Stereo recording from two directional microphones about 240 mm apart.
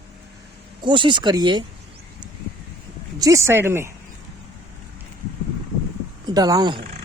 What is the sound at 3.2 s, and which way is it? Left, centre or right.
Speech, centre.